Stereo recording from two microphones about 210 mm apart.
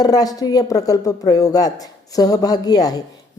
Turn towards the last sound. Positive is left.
turn(degrees=20)  # may be behind; listen again after turning